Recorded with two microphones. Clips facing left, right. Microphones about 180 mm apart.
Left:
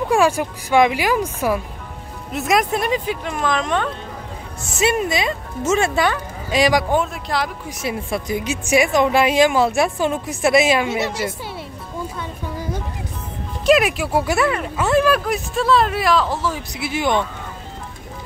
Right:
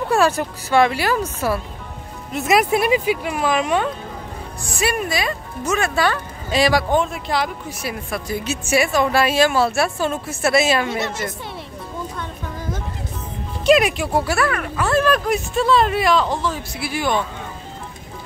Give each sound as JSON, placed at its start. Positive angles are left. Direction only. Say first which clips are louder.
{"t": 0.1, "sound": "a woman's voice", "louder": "left 1 dB", "side_deg": 10}
{"t": 2.3, "sound": "speech", "louder": "right 2 dB", "side_deg": 0}
{"t": 4.6, "sound": "speech", "louder": "left 3 dB", "side_deg": 20}
{"t": 7.8, "sound": "a woman's voice", "louder": "left 4 dB", "side_deg": 25}
{"t": 12.2, "sound": "a sound", "louder": "left 2 dB", "side_deg": 10}
{"t": 13.7, "sound": "speech", "louder": "even", "side_deg": 5}
{"t": 14.2, "sound": "a woman's voice", "louder": "left 2 dB", "side_deg": 20}
{"t": 16.7, "sound": "speech", "louder": "left 3 dB", "side_deg": 20}